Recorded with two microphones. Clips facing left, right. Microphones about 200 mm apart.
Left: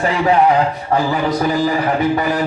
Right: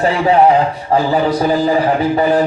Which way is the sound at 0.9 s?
30° right (ahead or behind).